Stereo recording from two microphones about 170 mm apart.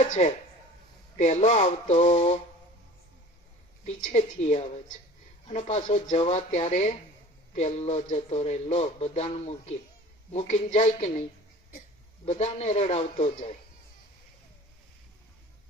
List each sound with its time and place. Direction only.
0.0 s speech: 40° left (ahead or behind)
3.8 s speech: 40° left (ahead or behind)
12.2 s speech: 40° left (ahead or behind)